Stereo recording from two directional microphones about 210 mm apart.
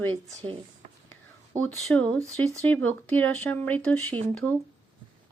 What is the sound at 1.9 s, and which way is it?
Speech, 5° left (ahead or behind).